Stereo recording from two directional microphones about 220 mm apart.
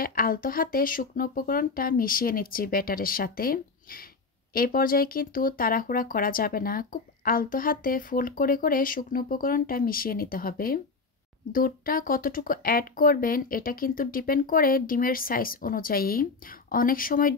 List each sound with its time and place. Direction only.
0.0 s speech: 40° left (ahead or behind)